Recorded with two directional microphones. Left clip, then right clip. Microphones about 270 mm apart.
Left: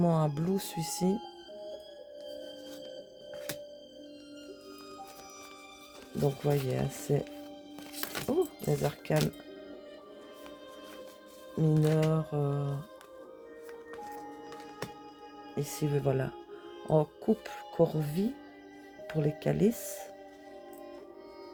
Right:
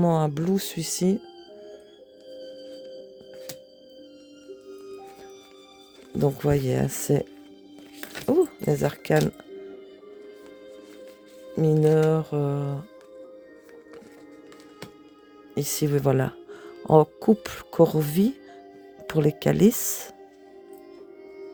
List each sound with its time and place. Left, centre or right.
0.0 s speech: right
6.1 s speech: right
8.3 s speech: right
11.5 s speech: right
15.5 s speech: right